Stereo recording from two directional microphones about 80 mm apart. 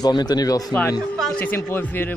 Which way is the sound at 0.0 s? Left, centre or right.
Left.